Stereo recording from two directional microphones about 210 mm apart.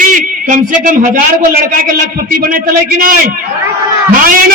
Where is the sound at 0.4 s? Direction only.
40° right (ahead or behind).